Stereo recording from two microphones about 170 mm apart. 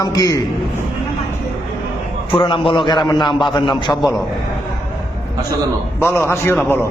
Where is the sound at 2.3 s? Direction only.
30° left (ahead or behind).